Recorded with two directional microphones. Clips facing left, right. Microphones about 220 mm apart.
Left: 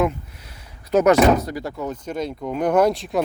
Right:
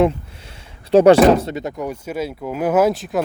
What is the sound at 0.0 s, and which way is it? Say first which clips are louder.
Speech: right 5 dB; 25° right (ahead or behind).